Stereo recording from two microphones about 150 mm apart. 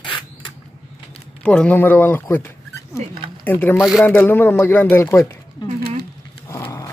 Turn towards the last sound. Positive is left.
turn(degrees=20)  # may be behind; listen again after turning